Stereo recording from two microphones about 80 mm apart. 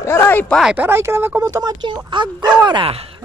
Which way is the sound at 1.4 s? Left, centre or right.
Right.